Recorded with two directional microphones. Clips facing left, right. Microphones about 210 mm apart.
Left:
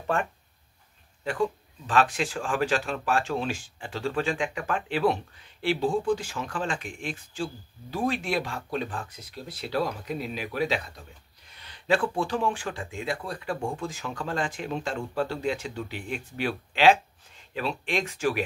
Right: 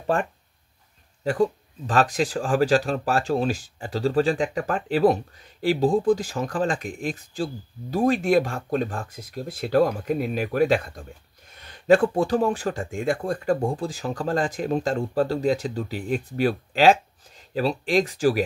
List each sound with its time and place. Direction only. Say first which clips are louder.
0.0 s speech: right 4 dB; 35° right (ahead or behind)